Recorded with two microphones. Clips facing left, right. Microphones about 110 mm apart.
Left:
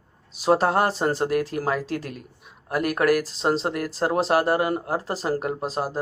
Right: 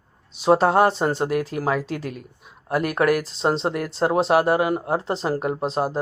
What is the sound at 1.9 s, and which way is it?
Speech, 35° left (ahead or behind).